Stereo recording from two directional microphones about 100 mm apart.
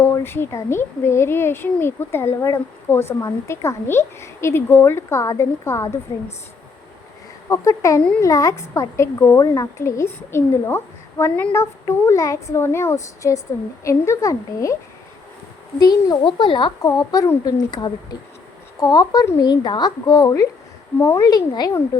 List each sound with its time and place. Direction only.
0.0 s speech: 20° left (ahead or behind)
7.5 s speech: 30° left (ahead or behind)
15.8 s speech: 40° left (ahead or behind)
16.2 s speech: 50° left (ahead or behind); by 21.2 s 30° left (ahead or behind)
21.2 s speech: 40° left (ahead or behind)